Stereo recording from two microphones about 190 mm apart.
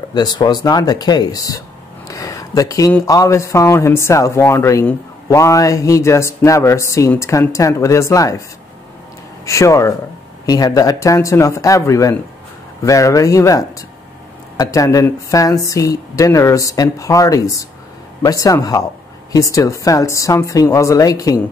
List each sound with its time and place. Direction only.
0.1 s speech: 20° left (ahead or behind)
9.5 s speech: 15° left (ahead or behind)